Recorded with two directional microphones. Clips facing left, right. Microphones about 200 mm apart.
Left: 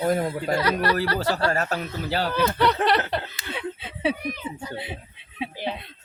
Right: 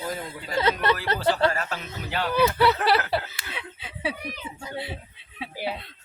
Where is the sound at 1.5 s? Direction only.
45° left (ahead or behind).